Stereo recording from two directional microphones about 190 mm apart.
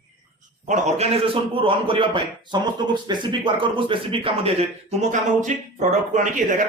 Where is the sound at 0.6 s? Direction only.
40° right (ahead or behind).